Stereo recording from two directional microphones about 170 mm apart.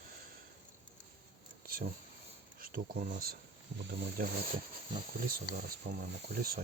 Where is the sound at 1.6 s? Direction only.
55° right (ahead or behind).